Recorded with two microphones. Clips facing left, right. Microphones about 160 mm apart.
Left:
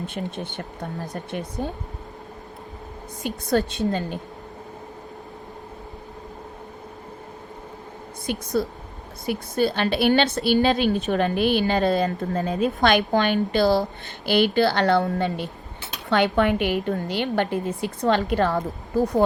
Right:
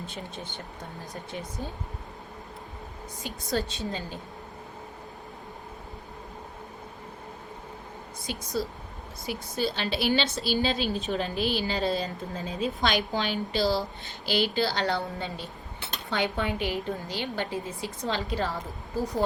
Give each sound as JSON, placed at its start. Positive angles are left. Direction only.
{"t": 0.1, "sound": "a woman's voice", "side_deg": 60}
{"t": 3.5, "sound": "a woman's voice", "side_deg": 60}
{"t": 8.3, "sound": "a woman's voice", "side_deg": 55}